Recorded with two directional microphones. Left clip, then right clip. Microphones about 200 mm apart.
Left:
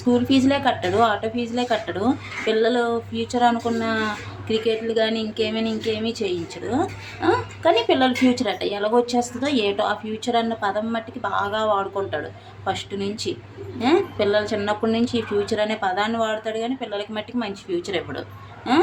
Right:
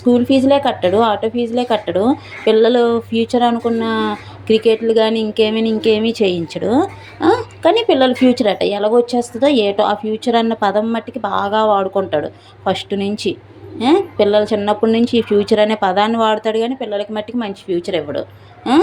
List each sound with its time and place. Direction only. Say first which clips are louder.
0.1 s speech: right 7 dB; 20° right (ahead or behind)